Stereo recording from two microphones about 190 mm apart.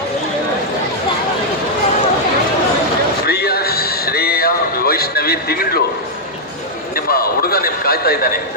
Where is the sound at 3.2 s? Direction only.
55° left (ahead or behind).